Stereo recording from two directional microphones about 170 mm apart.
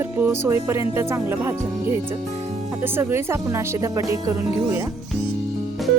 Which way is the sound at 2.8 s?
15° right (ahead or behind).